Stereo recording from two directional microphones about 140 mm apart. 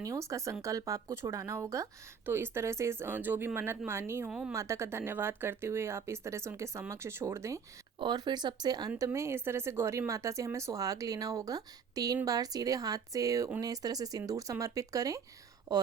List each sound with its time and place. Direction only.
0.0 s speech: 25° right (ahead or behind)
4.3 s speech: 5° right (ahead or behind)
4.5 s speech: 20° right (ahead or behind)
7.9 s speech: 30° right (ahead or behind)